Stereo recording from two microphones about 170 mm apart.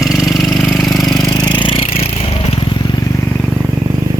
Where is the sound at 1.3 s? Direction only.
25° left (ahead or behind).